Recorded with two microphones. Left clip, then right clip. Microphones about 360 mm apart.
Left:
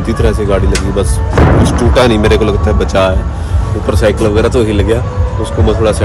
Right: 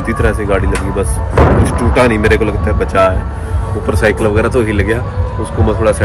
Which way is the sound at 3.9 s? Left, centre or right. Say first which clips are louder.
Left 1 dB; centre.